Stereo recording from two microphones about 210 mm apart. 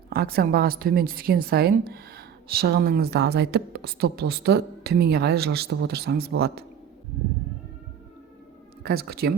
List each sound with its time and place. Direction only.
0.1 s a woman's voice: 45° right (ahead or behind)
8.8 s a woman's voice: 50° right (ahead or behind)